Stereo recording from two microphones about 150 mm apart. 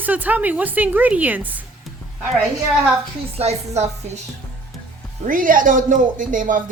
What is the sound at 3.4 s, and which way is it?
Speech, 45° right (ahead or behind).